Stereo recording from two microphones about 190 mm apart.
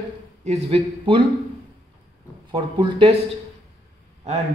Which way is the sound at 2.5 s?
25° right (ahead or behind).